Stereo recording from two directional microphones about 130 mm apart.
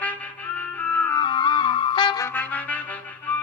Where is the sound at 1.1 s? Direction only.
35° left (ahead or behind).